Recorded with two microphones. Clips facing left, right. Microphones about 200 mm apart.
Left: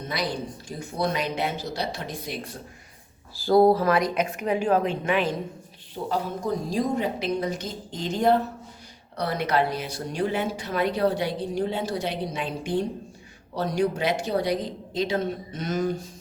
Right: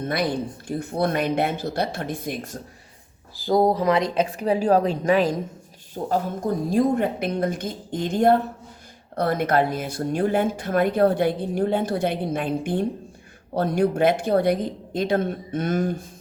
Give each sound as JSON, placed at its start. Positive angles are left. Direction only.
{"t": 0.0, "sound": "a woman's voice", "side_deg": -55}
{"t": 3.3, "sound": "a woman's voice", "side_deg": -15}